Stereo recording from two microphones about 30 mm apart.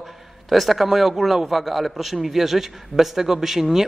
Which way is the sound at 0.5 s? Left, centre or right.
Centre.